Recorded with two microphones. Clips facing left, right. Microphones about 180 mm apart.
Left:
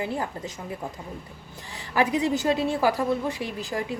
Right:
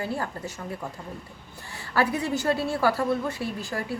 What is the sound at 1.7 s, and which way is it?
A woman's voice, 15° left (ahead or behind).